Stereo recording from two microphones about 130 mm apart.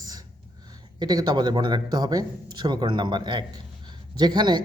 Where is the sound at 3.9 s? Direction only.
35° right (ahead or behind).